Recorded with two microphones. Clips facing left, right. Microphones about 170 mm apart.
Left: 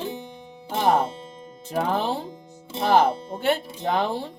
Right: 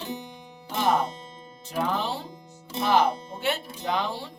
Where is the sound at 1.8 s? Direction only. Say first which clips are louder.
Left 3 dB; 50° left (ahead or behind).